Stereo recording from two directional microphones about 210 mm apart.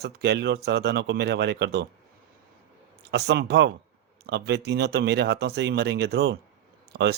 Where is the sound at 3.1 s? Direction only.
55° right (ahead or behind).